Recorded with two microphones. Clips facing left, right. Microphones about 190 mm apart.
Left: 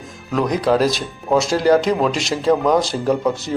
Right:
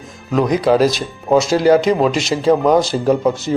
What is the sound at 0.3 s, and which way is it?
Speech, centre (ahead or behind).